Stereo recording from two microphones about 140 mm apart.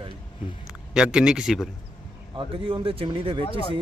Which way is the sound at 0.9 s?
5° right (ahead or behind).